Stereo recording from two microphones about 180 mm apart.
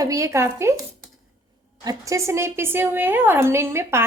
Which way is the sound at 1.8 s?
15° right (ahead or behind).